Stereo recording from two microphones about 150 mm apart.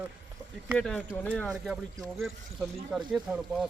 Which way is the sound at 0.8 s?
5° left (ahead or behind).